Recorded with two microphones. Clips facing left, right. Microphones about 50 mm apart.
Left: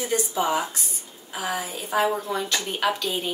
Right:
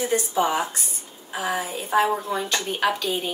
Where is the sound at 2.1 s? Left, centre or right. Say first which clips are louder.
Right 1 dB; centre.